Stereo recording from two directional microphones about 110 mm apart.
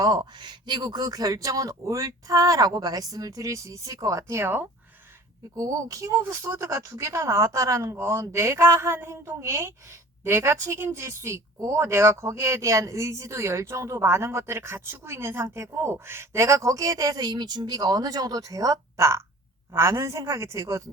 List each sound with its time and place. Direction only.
0.0 s speech: 40° right (ahead or behind); by 4.7 s 20° right (ahead or behind)
5.5 s a woman's voice: 30° right (ahead or behind)